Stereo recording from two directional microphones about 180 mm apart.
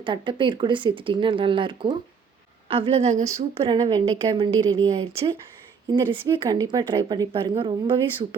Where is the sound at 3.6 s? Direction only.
25° right (ahead or behind).